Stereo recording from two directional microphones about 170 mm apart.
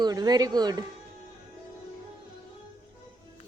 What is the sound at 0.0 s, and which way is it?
Speech, 25° right (ahead or behind).